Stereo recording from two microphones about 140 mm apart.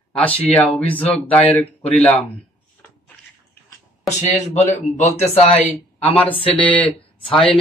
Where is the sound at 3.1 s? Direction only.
15° left (ahead or behind).